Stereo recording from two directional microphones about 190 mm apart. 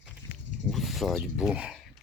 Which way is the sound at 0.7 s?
Centre (ahead or behind).